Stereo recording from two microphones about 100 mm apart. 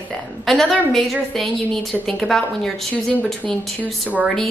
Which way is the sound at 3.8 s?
15° right (ahead or behind).